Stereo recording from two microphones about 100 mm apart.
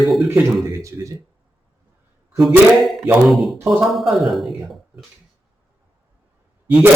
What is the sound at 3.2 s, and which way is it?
A man's voice, centre (ahead or behind).